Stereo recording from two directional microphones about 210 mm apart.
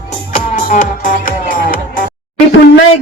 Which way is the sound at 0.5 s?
35° left (ahead or behind).